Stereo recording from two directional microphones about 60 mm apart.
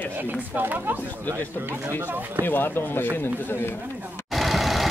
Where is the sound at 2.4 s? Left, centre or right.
Left.